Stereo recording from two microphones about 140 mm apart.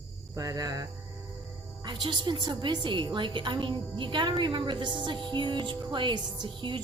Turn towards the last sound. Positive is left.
turn(degrees=-35)  # may be behind; listen again after turning